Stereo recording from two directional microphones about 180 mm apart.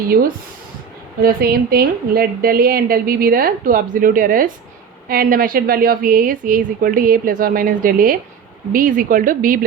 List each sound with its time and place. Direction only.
1.2 s a woman's voice: 55° right (ahead or behind)